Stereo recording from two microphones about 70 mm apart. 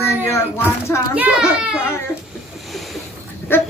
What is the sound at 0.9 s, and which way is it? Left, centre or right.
Speech, left.